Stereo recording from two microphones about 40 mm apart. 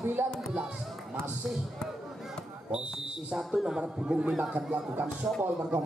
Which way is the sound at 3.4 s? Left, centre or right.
Centre.